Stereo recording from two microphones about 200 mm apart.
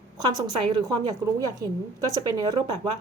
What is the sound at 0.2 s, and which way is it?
A woman's voice, 20° right (ahead or behind).